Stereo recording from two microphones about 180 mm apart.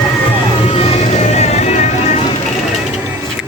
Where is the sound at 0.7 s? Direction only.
35° left (ahead or behind).